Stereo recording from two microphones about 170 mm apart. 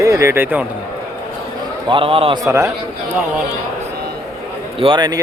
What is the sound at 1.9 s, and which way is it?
Speech, 30° right (ahead or behind).